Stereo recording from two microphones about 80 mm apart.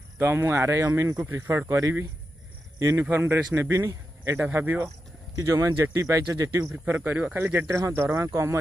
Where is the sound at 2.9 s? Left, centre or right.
Right.